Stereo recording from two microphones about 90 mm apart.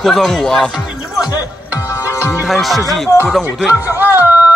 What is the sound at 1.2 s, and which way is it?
Music, 45° left (ahead or behind).